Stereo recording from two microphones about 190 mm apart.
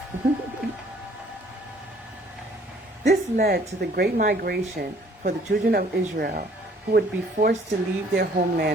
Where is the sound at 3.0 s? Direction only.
55° right (ahead or behind).